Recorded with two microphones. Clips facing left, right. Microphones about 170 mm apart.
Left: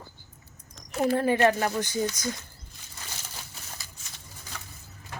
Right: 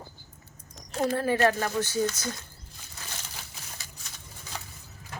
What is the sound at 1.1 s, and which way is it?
Speech, 15° left (ahead or behind).